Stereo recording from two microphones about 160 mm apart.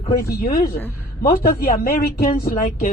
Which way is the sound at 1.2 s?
70° left (ahead or behind).